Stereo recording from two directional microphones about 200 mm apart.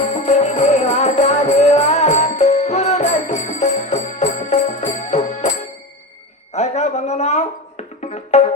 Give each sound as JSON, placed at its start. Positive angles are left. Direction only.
{"t": 0.3, "sound": "music", "side_deg": 35}
{"t": 6.5, "sound": "a sound", "side_deg": 35}
{"t": 8.0, "sound": "music", "side_deg": 35}